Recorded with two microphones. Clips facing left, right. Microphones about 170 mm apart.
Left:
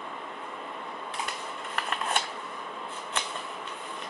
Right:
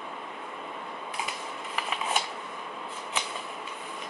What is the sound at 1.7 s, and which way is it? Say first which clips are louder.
Shuffling cards: even; 5° right (ahead or behind).